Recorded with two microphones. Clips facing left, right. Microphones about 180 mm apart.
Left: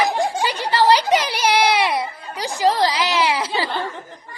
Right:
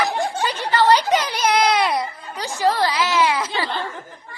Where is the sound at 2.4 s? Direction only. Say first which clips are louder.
Left 2 dB; 15° left (ahead or behind).